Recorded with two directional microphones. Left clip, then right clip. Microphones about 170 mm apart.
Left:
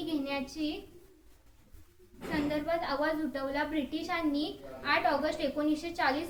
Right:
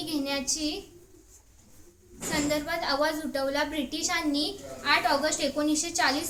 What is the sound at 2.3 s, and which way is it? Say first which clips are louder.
A woman's voice: right 3 dB; 20° right (ahead or behind).